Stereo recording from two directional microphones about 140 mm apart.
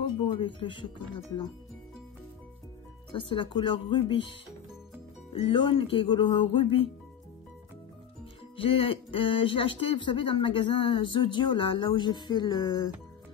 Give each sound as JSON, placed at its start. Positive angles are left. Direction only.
{"t": 0.2, "sound": "speech", "side_deg": 35}
{"t": 3.1, "sound": "speech", "side_deg": 35}
{"t": 8.5, "sound": "speech", "side_deg": 40}